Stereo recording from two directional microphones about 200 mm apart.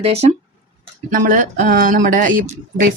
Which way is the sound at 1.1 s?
45° right (ahead or behind).